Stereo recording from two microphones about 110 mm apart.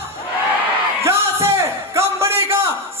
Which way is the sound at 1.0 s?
25° right (ahead or behind).